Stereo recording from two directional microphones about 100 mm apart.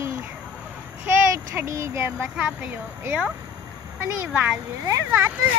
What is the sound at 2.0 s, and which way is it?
Speech, 15° right (ahead or behind).